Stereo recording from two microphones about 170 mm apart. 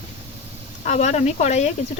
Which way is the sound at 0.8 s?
40° left (ahead or behind).